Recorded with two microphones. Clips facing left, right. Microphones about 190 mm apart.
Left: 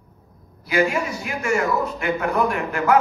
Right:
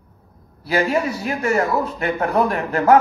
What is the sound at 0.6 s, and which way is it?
Speech, 35° right (ahead or behind).